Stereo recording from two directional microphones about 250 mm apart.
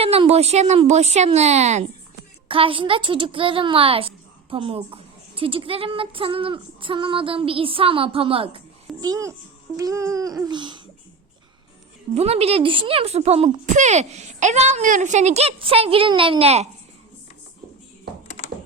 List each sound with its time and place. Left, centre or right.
0.0 s a child's voice: right
9.0 s humming: centre
12.1 s a child's voice: right